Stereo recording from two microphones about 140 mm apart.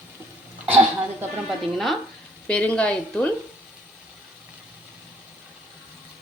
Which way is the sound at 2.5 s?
10° left (ahead or behind).